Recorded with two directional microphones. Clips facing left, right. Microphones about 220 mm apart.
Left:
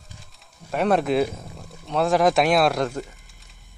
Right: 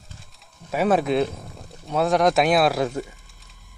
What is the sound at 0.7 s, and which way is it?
Speech, 5° right (ahead or behind).